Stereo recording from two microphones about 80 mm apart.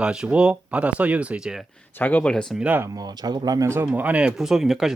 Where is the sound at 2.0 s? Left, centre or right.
Left.